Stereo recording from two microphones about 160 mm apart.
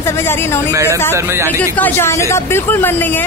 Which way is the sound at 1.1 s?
15° right (ahead or behind).